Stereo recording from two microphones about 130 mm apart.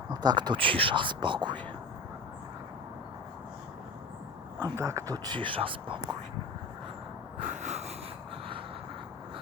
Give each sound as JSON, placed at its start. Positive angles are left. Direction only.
{"t": 0.1, "sound": "speech", "side_deg": -30}
{"t": 4.6, "sound": "speech", "side_deg": -25}
{"t": 7.4, "sound": "wheeze", "side_deg": -65}